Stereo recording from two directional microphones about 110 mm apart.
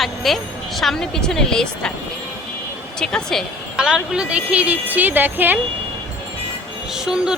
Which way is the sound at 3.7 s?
5° right (ahead or behind).